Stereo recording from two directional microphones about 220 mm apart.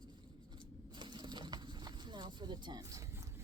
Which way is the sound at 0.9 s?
20° right (ahead or behind).